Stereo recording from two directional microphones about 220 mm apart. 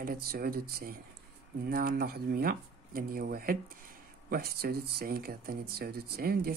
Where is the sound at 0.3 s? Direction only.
45° right (ahead or behind).